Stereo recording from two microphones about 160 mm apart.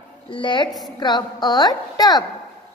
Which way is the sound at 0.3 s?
30° left (ahead or behind).